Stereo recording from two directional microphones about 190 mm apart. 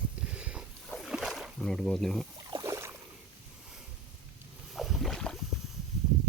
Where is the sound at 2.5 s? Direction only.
20° right (ahead or behind).